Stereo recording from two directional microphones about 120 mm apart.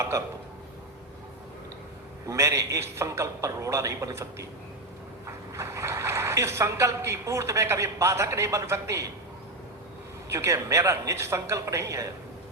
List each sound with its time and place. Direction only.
0.1 s a man's voice: 25° right (ahead or behind)
2.2 s a man's voice: 25° right (ahead or behind)
10.3 s a man's voice: 25° right (ahead or behind)